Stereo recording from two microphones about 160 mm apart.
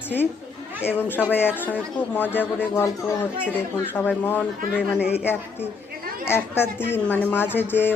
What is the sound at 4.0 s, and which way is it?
Speech, 10° left (ahead or behind).